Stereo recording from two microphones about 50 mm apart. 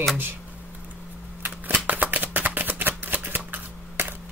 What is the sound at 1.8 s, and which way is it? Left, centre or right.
Shuffling cards, right.